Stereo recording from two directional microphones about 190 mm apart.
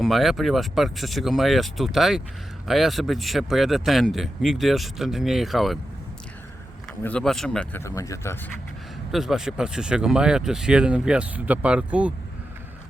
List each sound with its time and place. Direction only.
0.0 s speech: centre (ahead or behind)
7.0 s speech: 5° left (ahead or behind)
7.9 s speech: 15° left (ahead or behind)
9.1 s speech: centre (ahead or behind)